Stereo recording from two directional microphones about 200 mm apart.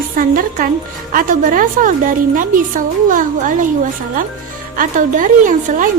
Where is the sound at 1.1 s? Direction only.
45° right (ahead or behind).